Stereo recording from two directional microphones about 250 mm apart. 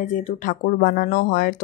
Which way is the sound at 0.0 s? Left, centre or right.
Left.